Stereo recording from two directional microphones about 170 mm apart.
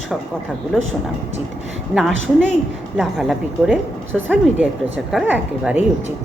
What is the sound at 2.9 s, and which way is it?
A woman's voice, centre (ahead or behind).